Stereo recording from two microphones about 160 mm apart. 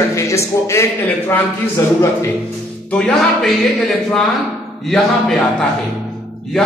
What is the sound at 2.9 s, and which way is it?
Speech, 5° left (ahead or behind).